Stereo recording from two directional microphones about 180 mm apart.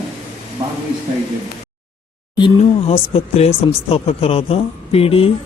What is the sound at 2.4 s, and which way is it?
Speech, 30° left (ahead or behind).